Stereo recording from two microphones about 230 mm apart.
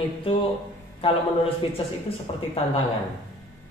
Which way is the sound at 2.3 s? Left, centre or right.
Left.